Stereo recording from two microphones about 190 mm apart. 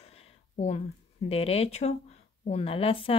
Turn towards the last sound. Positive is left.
turn(degrees=30)  # may be behind; listen again after turning